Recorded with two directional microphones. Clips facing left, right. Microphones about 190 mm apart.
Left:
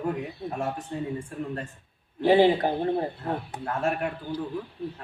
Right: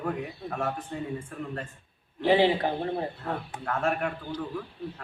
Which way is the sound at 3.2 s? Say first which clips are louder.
Left 2 dB; 20° left (ahead or behind).